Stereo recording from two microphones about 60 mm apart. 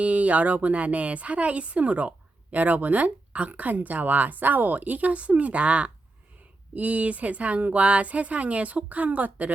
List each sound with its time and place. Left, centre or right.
0.0 s a woman's voice: right